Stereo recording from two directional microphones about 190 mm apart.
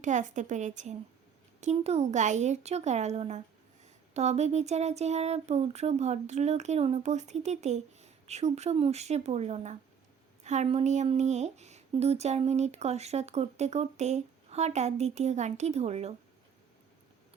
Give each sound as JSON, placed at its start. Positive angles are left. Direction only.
{"t": 0.0, "sound": "speech", "side_deg": -40}